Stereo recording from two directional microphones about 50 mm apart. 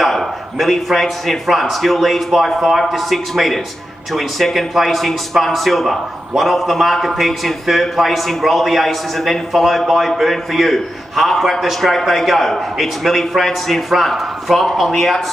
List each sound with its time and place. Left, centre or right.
0.0 s a man's voice: centre